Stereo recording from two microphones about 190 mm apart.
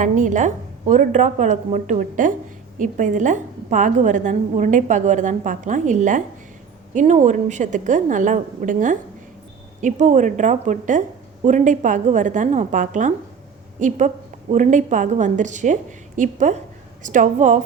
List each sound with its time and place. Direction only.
0.0 s a woman's voice: 40° right (ahead or behind)